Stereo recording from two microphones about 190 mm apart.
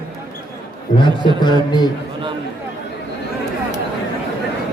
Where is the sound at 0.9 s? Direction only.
25° left (ahead or behind).